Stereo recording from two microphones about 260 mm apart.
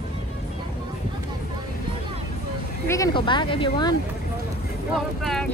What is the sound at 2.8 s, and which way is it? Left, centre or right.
Speech, centre.